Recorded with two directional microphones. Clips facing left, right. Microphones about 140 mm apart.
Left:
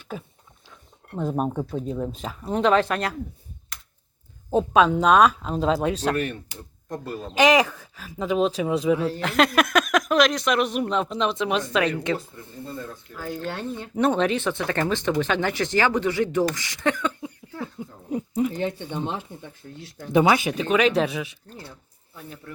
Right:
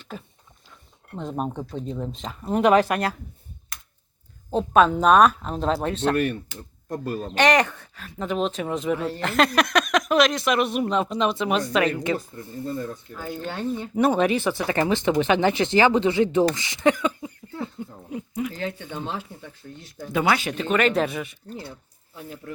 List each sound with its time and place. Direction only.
0.0 s speech: 10° left (ahead or behind); by 3.2 s 10° right (ahead or behind)
4.7 s speech: centre (ahead or behind)
7.3 s speech: 5° left (ahead or behind); by 17.2 s 10° right (ahead or behind)
17.2 s a sound: centre (ahead or behind)
18.1 s a sound: 30° left (ahead or behind)
18.5 s speech: 20° left (ahead or behind); by 21.3 s centre (ahead or behind)
21.5 s speech: 10° right (ahead or behind)